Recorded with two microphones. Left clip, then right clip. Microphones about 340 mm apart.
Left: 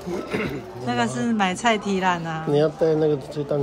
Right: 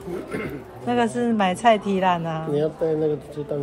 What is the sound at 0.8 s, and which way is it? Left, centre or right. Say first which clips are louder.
Speech: right 2 dB; centre.